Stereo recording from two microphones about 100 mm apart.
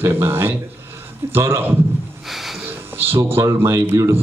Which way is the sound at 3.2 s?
30° right (ahead or behind).